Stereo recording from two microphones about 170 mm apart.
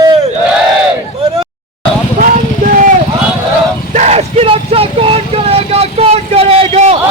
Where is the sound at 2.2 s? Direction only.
50° right (ahead or behind).